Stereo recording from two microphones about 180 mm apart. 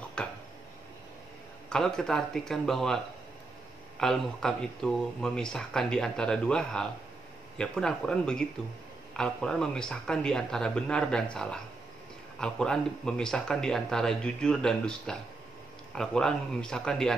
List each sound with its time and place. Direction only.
0.2 s a sound: 5° left (ahead or behind)
1.7 s speech: 5° left (ahead or behind)
4.0 s speech: 5° left (ahead or behind)